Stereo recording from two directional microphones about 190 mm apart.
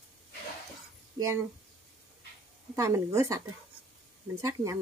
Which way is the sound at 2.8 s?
15° right (ahead or behind).